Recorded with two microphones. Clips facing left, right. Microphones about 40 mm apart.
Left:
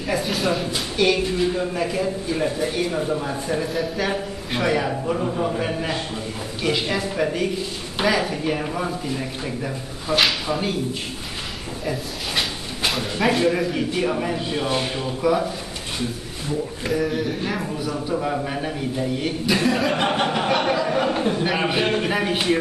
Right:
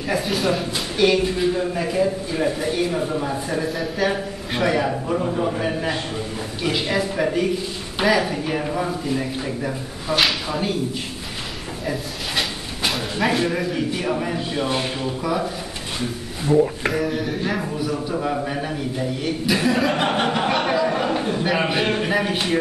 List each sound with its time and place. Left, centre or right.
0.1 s a man's voice: centre
11.8 s speech: centre
16.4 s speech: right
16.9 s a man's voice: centre